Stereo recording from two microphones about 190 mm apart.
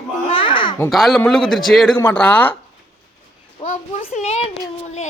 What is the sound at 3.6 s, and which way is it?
Speech, 35° left (ahead or behind).